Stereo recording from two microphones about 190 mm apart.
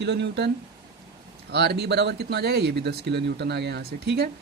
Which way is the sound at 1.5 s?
60° right (ahead or behind).